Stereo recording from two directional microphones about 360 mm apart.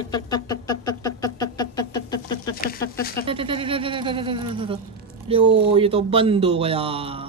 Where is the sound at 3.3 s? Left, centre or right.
Centre.